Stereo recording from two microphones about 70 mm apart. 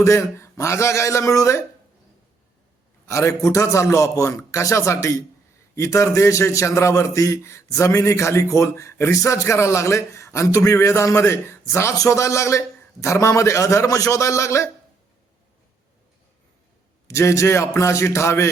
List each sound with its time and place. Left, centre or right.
0.0 s a man's voice: left
3.1 s a man's voice: left
17.1 s a man's voice: left